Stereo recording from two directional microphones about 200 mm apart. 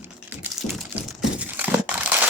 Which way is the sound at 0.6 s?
35° left (ahead or behind).